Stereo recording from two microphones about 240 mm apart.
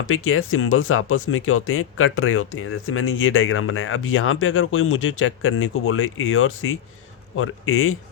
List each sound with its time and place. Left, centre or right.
0.0 s speech: left